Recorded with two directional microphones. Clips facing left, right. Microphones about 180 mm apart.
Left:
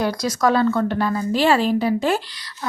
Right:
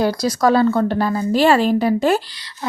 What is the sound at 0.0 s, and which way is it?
A woman's voice, 30° right (ahead or behind).